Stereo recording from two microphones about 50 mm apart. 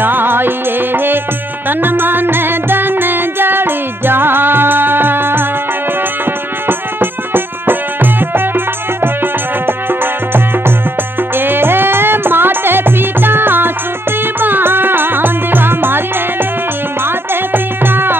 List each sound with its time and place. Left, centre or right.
0.0 s music: right